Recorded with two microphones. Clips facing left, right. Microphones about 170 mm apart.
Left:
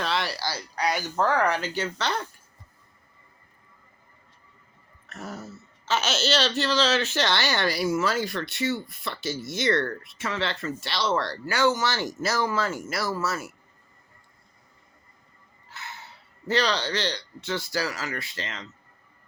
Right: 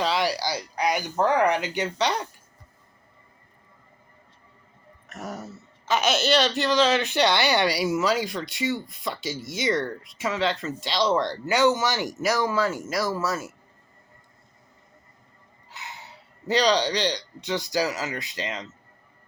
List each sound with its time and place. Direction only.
0.0 s speech: 10° right (ahead or behind)
5.0 s speech: 20° right (ahead or behind)
15.7 s a man's voice: 15° right (ahead or behind)